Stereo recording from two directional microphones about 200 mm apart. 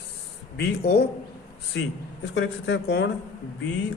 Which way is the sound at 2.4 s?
60° left (ahead or behind).